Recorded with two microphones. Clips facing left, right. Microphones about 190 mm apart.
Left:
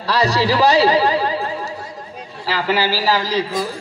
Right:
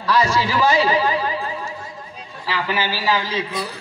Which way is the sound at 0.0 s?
35° left (ahead or behind).